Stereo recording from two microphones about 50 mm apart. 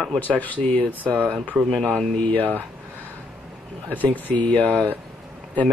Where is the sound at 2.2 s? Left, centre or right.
Left.